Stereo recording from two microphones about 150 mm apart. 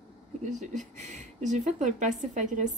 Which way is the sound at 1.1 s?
55° right (ahead or behind).